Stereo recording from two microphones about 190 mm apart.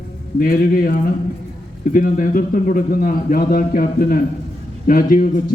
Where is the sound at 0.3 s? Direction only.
50° left (ahead or behind).